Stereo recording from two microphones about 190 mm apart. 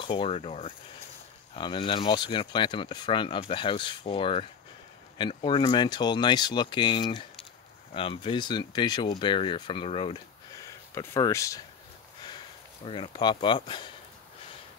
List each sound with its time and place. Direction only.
0.0 s speech: 25° left (ahead or behind)
11.0 s speech: 15° left (ahead or behind)
12.8 s speech: 25° left (ahead or behind)